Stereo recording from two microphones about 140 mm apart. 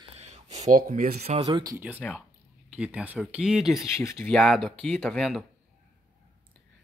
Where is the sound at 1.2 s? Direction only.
50° right (ahead or behind).